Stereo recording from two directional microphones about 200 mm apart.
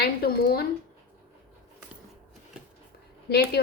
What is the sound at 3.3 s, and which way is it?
Speech, 50° left (ahead or behind).